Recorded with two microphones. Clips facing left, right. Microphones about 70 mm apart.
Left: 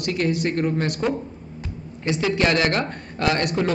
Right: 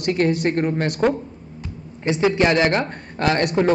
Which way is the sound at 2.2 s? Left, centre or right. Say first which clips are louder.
Right 4 dB; right.